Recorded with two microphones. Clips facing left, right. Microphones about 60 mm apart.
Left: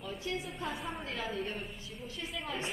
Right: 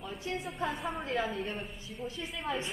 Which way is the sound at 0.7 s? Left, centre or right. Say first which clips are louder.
Right 3 dB; centre.